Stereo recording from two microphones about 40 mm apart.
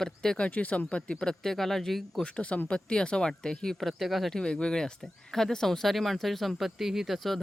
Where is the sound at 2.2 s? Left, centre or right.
Left; by 4.3 s centre.